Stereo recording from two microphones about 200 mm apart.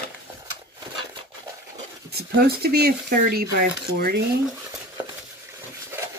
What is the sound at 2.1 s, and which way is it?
Speech, 50° right (ahead or behind).